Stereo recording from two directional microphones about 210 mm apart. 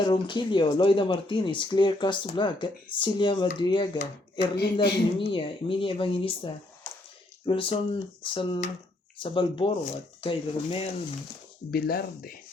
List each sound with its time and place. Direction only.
0.0 s speech: 20° left (ahead or behind)
4.5 s speech: 50° left (ahead or behind)
5.3 s speech: 25° left (ahead or behind)
11.7 s speech: 45° left (ahead or behind)